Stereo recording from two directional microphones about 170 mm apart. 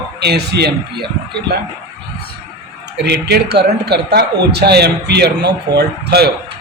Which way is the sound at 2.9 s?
75° right (ahead or behind).